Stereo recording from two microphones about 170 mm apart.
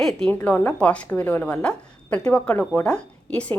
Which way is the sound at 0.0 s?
5° left (ahead or behind).